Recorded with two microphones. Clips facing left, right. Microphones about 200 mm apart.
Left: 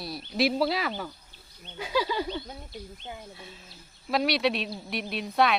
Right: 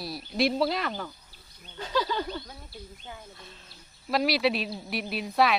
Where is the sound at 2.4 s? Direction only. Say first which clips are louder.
Left 4 dB; 20° left (ahead or behind).